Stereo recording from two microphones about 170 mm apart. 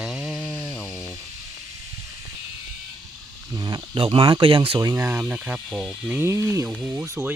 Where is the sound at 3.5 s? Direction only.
25° right (ahead or behind); by 6.2 s 5° right (ahead or behind).